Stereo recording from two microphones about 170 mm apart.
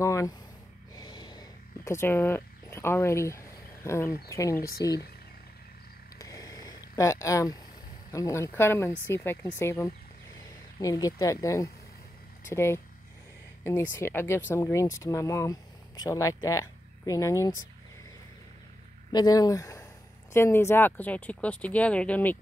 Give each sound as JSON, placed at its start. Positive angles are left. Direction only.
{"t": 0.0, "sound": "a sound", "side_deg": 20}
{"t": 0.9, "sound": "gasp", "side_deg": 25}
{"t": 1.9, "sound": "speech", "side_deg": 15}
{"t": 6.1, "sound": "a sound", "side_deg": 20}
{"t": 7.0, "sound": "speech", "side_deg": 20}
{"t": 13.9, "sound": "speech", "side_deg": 15}
{"t": 19.1, "sound": "speech", "side_deg": 25}